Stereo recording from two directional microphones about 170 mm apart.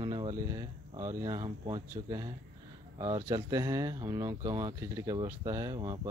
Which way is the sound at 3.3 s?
20° right (ahead or behind).